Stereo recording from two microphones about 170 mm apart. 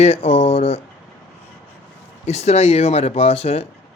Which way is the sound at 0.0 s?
35° left (ahead or behind).